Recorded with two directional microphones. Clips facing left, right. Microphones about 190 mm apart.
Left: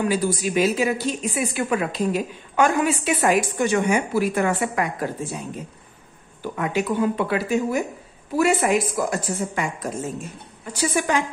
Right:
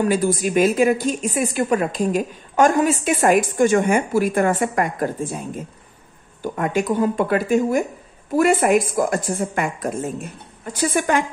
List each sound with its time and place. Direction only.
0.0 s a woman's voice: 50° right (ahead or behind)
6.4 s a woman's voice: 45° right (ahead or behind)